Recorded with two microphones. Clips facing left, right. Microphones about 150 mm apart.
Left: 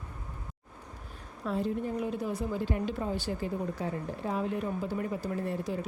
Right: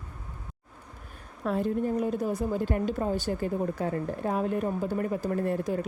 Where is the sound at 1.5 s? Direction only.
55° right (ahead or behind).